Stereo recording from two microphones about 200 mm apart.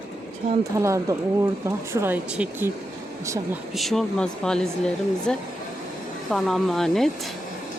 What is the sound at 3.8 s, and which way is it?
Speech, centre (ahead or behind).